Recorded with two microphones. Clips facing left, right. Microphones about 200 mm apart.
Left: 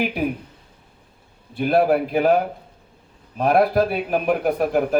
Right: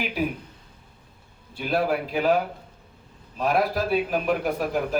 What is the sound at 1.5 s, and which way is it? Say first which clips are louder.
Speech: left 7 dB; 55° left (ahead or behind).